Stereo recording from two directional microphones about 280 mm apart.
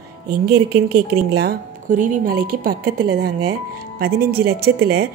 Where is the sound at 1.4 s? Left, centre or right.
Right.